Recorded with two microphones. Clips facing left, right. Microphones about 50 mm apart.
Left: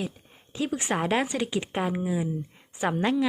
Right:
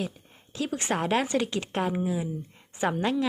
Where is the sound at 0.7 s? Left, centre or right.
Centre.